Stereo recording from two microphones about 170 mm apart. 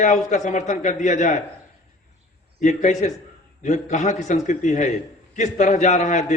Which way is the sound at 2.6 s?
45° left (ahead or behind).